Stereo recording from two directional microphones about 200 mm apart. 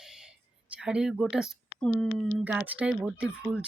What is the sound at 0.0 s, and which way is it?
Speech, centre (ahead or behind).